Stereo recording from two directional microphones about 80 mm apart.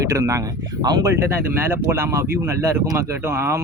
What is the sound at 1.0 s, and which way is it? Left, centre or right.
Speech, right.